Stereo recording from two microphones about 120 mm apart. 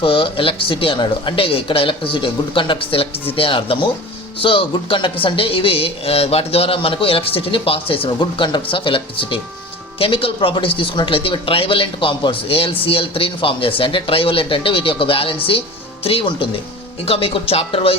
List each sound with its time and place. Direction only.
0.0 s a woman's voice: 45° left (ahead or behind)